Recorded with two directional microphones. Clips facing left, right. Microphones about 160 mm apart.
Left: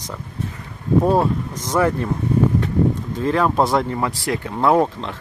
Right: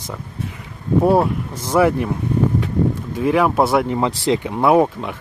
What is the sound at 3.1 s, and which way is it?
Speech, 10° right (ahead or behind).